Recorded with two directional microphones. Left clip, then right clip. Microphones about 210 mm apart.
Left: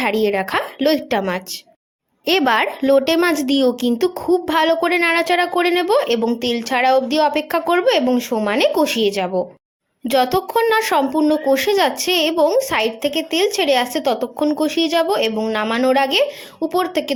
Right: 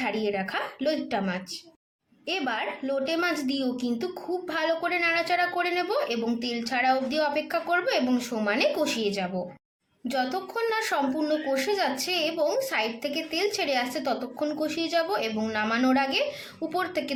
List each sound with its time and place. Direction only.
0.0 s a woman's voice: 45° left (ahead or behind)